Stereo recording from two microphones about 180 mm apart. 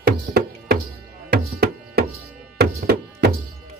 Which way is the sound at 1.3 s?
65° right (ahead or behind).